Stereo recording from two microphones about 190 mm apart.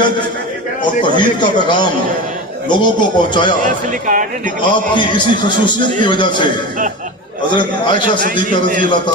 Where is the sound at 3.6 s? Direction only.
45° right (ahead or behind).